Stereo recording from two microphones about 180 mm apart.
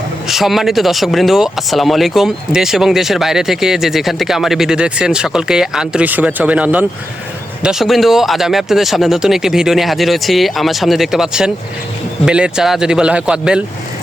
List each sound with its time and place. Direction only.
0.3 s speech: centre (ahead or behind)